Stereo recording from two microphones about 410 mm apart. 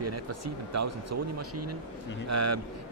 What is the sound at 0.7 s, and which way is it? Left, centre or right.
A man's voice, right.